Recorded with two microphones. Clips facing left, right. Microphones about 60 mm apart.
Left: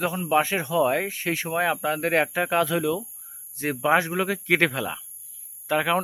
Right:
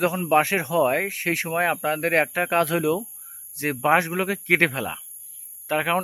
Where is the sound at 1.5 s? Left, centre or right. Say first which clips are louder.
Right 1 dB; right.